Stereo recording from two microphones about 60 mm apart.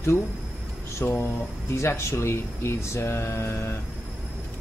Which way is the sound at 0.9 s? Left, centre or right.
Left.